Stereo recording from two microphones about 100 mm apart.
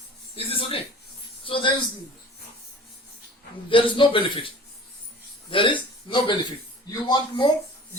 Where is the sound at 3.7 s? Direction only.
60° left (ahead or behind).